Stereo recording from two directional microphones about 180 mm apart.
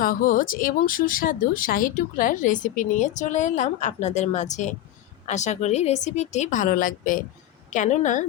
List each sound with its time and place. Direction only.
0.0 s a woman's voice: 50° left (ahead or behind)